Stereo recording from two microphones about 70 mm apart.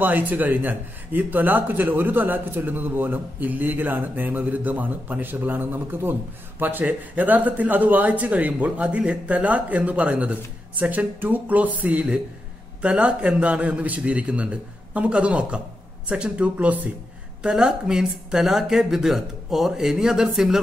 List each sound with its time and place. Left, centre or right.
0.0 s a man's voice: right; by 20.6 s centre